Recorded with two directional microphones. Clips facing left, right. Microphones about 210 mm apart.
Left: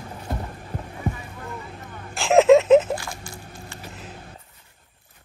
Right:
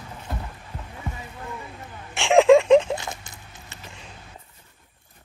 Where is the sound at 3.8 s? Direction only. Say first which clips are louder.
Left 3 dB; 5° left (ahead or behind).